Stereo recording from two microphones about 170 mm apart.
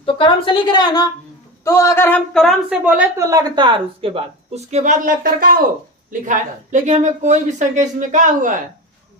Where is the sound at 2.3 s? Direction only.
Centre (ahead or behind); by 8.5 s 50° right (ahead or behind).